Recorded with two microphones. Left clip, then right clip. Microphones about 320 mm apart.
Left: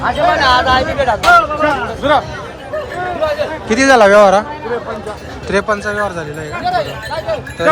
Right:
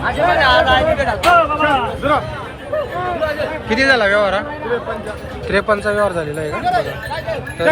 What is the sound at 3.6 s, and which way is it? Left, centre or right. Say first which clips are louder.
Speech: left 5 dB; left.